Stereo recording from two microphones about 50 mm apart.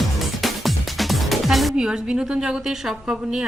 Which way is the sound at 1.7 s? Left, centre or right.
Centre.